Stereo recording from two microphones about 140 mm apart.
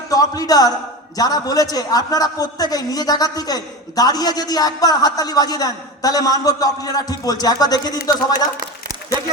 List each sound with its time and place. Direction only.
0.1 s a man's voice: 25° left (ahead or behind)